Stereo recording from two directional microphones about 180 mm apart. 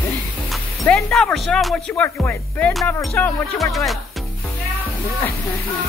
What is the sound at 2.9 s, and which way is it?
Speech, 10° left (ahead or behind).